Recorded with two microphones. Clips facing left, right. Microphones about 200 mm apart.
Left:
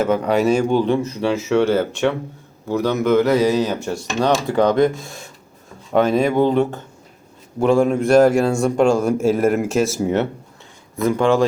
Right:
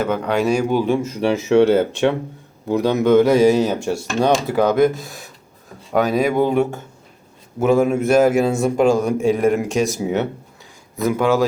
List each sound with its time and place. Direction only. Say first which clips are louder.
0.0 s speech: left 2 dB; 5° left (ahead or behind); by 3.5 s 15° right (ahead or behind)
3.5 s speech: right 2 dB; 25° right (ahead or behind)
3.8 s a man's voice: right 1 dB; 10° right (ahead or behind)